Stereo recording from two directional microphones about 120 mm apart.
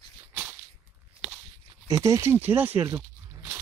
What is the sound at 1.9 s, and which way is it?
Speech, 25° right (ahead or behind).